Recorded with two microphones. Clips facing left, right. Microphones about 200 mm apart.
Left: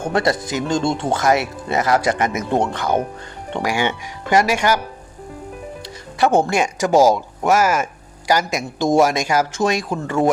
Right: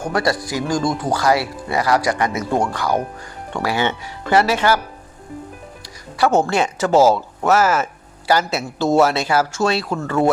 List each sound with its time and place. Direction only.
0.0 s speech: 25° left (ahead or behind)
5.8 s speech: 20° left (ahead or behind)